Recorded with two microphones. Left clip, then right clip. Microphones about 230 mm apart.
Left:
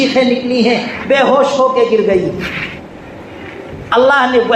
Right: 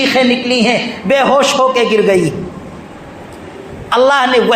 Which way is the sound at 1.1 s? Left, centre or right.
Right.